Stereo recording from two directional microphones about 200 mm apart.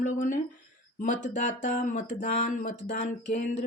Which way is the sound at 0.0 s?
40° left (ahead or behind).